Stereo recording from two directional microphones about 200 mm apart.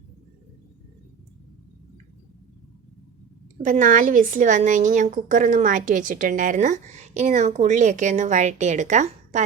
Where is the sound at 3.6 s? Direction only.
40° right (ahead or behind).